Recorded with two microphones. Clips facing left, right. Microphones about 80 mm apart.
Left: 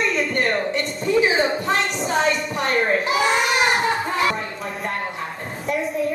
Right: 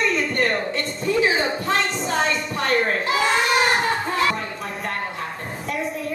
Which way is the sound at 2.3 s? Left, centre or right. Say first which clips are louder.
Left 1 dB; left.